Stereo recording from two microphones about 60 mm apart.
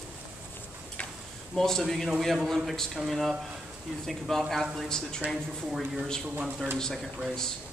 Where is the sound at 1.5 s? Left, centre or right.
Centre.